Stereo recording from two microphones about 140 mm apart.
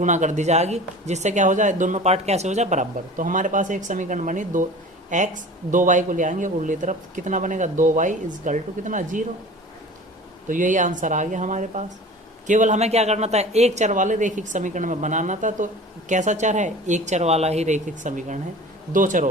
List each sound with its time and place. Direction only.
0.0 s speech: 60° right (ahead or behind)
10.5 s speech: 65° right (ahead or behind)